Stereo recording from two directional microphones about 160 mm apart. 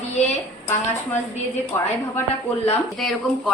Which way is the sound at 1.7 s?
15° left (ahead or behind).